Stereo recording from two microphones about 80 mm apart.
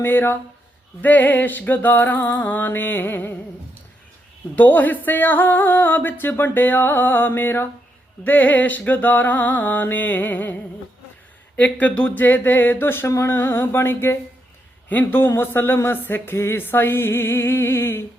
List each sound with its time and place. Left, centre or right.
0.0 s speech: left
4.5 s speech: left